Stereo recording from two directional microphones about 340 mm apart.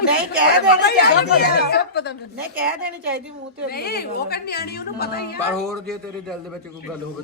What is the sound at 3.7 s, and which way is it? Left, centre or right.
A woman's voice, left.